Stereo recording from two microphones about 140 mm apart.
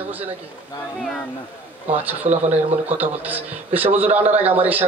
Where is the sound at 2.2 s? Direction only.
55° right (ahead or behind).